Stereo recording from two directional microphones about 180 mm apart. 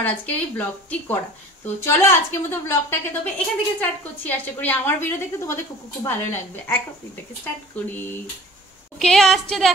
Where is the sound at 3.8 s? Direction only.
10° left (ahead or behind).